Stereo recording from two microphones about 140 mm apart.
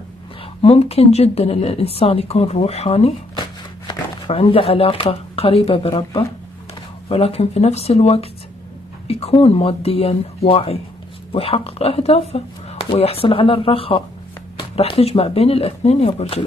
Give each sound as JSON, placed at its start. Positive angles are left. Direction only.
{"t": 0.6, "sound": "speech", "side_deg": 45}
{"t": 4.3, "sound": "speech", "side_deg": 45}